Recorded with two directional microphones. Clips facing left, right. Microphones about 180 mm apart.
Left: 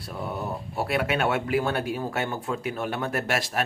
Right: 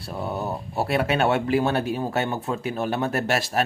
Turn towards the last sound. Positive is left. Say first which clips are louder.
# right 3 dB
turn(degrees=-30)  # may be behind; listen again after turning